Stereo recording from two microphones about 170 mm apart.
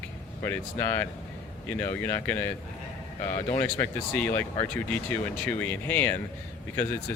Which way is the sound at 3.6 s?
10° left (ahead or behind).